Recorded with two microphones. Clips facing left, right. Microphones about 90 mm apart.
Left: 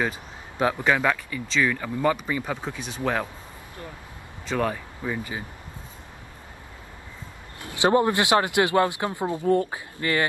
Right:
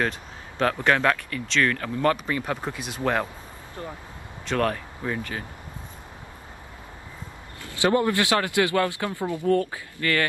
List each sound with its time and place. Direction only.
0.0 s speech: 10° left (ahead or behind)
4.5 s speech: 5° left (ahead or behind)
7.6 s speech: 20° left (ahead or behind)